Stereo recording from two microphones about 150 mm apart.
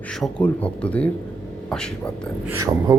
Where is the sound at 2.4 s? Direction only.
20° right (ahead or behind).